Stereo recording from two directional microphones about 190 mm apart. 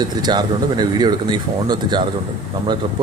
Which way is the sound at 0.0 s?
20° right (ahead or behind).